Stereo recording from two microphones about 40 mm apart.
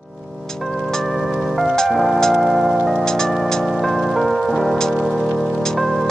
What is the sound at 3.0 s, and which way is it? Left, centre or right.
Music, centre.